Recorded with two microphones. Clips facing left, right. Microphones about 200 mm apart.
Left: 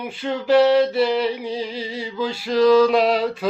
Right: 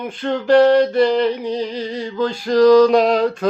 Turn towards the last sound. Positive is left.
turn(degrees=5)  # may be behind; listen again after turning